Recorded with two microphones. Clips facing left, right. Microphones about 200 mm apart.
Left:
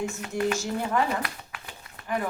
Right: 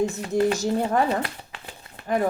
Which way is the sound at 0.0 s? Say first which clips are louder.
Right 6 dB; 35° right (ahead or behind).